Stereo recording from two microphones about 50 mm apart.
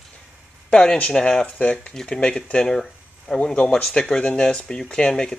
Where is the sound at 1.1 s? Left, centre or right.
Centre.